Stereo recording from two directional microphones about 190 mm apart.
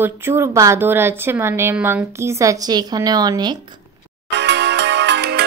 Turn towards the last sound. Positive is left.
turn(degrees=-60)  # may be behind; listen again after turning